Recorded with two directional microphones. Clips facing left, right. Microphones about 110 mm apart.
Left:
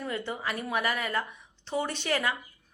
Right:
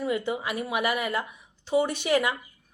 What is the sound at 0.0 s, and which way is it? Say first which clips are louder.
Speech: right 5 dB; 10° right (ahead or behind).